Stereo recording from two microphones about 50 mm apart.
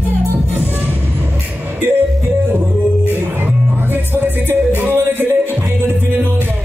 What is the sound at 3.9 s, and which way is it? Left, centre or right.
Music, right.